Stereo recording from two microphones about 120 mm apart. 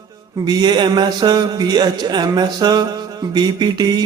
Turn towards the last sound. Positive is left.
turn(degrees=-35)  # may be behind; listen again after turning